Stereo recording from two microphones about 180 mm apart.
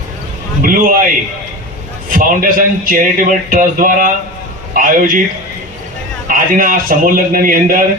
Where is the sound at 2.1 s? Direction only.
50° right (ahead or behind).